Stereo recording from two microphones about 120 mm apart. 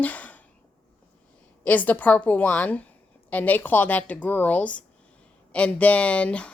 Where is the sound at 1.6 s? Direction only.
15° left (ahead or behind).